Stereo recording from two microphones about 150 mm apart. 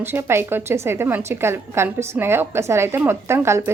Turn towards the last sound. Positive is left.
turn(degrees=-15)  # may be behind; listen again after turning